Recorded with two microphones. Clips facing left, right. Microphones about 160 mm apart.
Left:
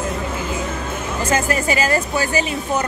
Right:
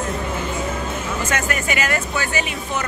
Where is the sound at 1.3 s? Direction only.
30° left (ahead or behind).